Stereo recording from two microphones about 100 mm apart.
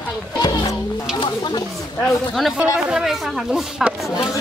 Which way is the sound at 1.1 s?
50° left (ahead or behind).